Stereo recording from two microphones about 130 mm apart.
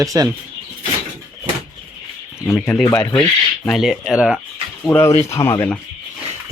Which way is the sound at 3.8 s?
Centre (ahead or behind).